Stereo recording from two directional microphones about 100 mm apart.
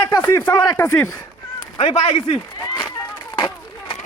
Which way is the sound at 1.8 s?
80° left.